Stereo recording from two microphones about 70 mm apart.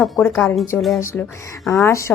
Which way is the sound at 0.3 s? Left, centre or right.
Centre.